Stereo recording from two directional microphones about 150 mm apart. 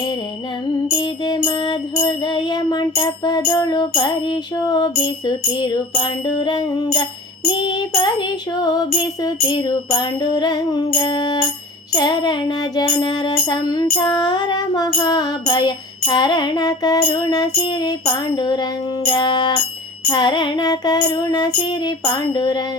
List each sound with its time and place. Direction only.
0.9 s music: 30° left (ahead or behind)